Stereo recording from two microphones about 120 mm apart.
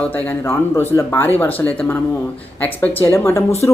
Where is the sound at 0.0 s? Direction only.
15° left (ahead or behind).